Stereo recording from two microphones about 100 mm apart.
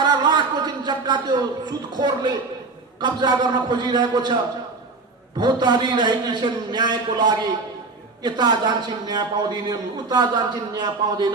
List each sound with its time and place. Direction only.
0.0 s a sound: 45° right (ahead or behind)
3.0 s a man's voice: 45° right (ahead or behind)
5.4 s a man's voice: 45° right (ahead or behind)